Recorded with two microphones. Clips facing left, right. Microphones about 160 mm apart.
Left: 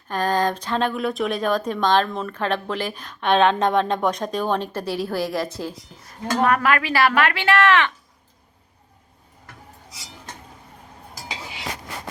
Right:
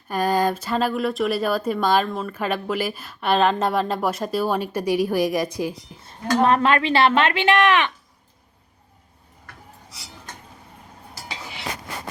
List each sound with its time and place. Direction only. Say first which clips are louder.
0.1 s speech: right 1 dB; 10° right (ahead or behind)
6.4 s speech: right 1 dB; 25° right (ahead or behind)